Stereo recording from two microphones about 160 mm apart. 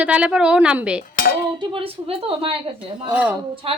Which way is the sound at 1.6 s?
35° right (ahead or behind).